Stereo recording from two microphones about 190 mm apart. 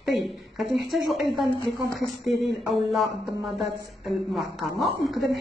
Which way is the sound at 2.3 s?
Centre (ahead or behind).